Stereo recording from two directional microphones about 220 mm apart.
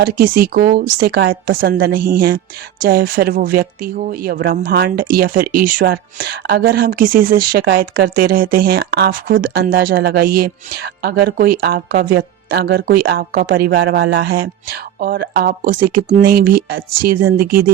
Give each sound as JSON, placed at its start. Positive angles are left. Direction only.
{"t": 0.0, "sound": "speech", "side_deg": -40}